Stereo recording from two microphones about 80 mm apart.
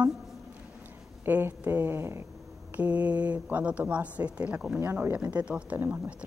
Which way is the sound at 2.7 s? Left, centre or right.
Centre.